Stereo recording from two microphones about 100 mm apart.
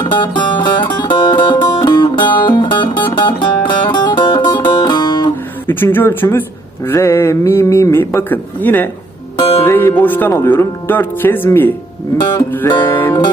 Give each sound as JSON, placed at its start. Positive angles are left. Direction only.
{"t": 0.0, "sound": "music", "side_deg": 50}
{"t": 5.6, "sound": "speech", "side_deg": 20}
{"t": 9.4, "sound": "music", "side_deg": 65}
{"t": 9.6, "sound": "music", "side_deg": 20}
{"t": 10.0, "sound": "speech", "side_deg": 20}